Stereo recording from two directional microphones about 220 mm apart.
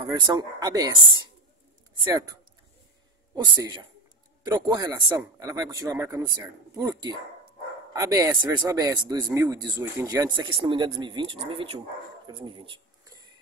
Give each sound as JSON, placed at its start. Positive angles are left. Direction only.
{"t": 0.0, "sound": "speech", "side_deg": -20}
{"t": 3.5, "sound": "speech", "side_deg": -20}
{"t": 12.3, "sound": "a sound", "side_deg": -20}